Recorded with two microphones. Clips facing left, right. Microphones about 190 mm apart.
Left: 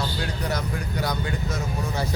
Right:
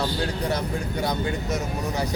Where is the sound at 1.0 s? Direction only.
25° right (ahead or behind).